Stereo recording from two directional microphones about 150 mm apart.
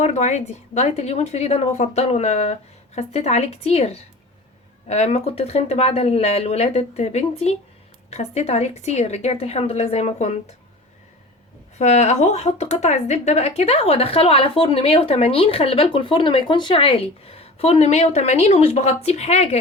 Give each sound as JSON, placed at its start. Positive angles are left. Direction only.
{"t": 0.0, "sound": "speech", "side_deg": 50}
{"t": 11.8, "sound": "speech", "side_deg": 50}